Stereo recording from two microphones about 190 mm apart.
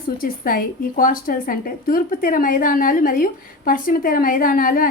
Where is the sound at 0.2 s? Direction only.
50° left (ahead or behind).